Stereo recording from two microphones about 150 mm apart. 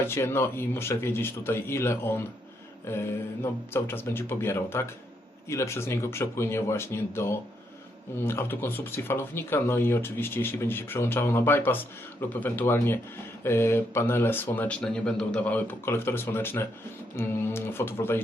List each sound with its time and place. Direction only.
0.0 s speech: 15° left (ahead or behind)
3.4 s speech: 15° left (ahead or behind)